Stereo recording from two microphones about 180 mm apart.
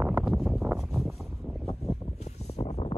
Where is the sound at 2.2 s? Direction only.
35° left (ahead or behind).